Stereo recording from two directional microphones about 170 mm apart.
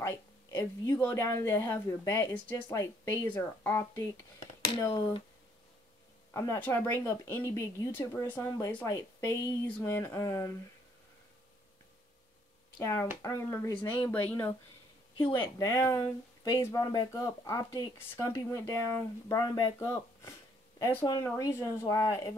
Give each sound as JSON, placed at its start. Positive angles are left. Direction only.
{"t": 0.5, "sound": "speech", "side_deg": 15}
{"t": 6.3, "sound": "speech", "side_deg": 15}
{"t": 12.7, "sound": "speech", "side_deg": 15}
{"t": 13.8, "sound": "speech", "side_deg": 25}
{"t": 14.1, "sound": "speech", "side_deg": 10}